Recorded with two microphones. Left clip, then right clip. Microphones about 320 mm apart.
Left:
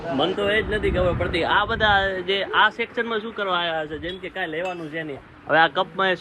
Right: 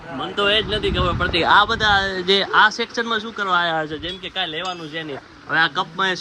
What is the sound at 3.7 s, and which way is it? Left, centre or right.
Speech, right.